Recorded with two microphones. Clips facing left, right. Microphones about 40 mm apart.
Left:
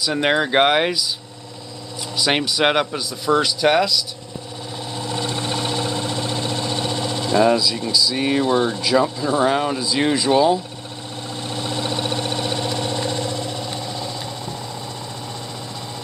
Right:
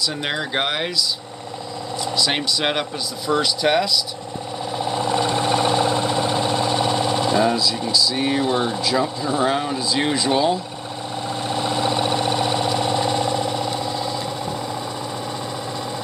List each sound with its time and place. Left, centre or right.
0.1 s speech: left
2.1 s speech: centre
4.8 s vehicle: right
6.9 s a sound: centre
7.4 s speech: centre
11.4 s vehicle: centre